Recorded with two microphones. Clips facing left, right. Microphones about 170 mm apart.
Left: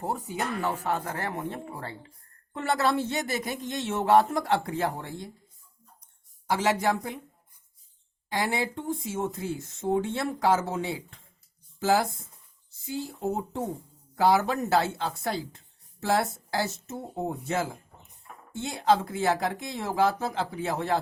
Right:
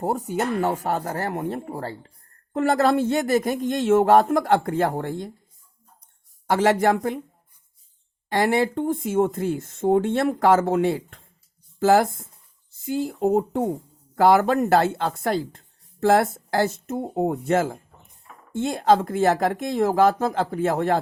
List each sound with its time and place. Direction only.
0.0 s speech: 50° right (ahead or behind)
0.3 s music: 40° right (ahead or behind)
2.5 s speech: 50° right (ahead or behind)
6.5 s speech: 55° right (ahead or behind)
8.3 s speech: 55° right (ahead or behind)